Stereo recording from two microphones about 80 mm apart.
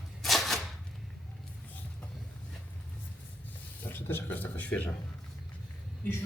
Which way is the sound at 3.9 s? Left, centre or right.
Left.